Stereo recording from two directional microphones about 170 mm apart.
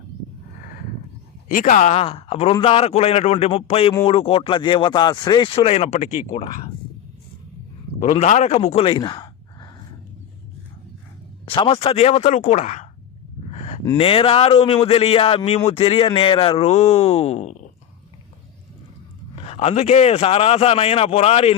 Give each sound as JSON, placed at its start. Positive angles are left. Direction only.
{"t": 1.5, "sound": "speech", "side_deg": 50}
{"t": 7.9, "sound": "speech", "side_deg": 40}
{"t": 11.4, "sound": "speech", "side_deg": 30}
{"t": 13.5, "sound": "a sound", "side_deg": 45}
{"t": 13.8, "sound": "speech", "side_deg": 30}
{"t": 19.4, "sound": "speech", "side_deg": 35}